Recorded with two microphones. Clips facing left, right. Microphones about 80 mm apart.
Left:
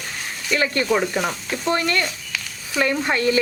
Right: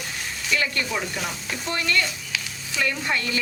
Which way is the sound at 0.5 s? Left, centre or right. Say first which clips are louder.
Left 6 dB; left.